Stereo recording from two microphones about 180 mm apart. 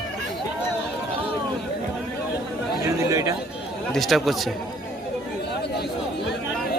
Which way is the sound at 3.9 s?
Centre (ahead or behind).